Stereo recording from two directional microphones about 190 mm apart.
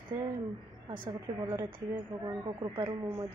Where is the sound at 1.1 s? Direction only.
20° right (ahead or behind).